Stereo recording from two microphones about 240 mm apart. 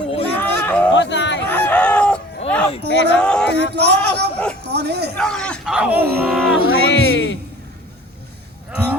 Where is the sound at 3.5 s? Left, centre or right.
Right.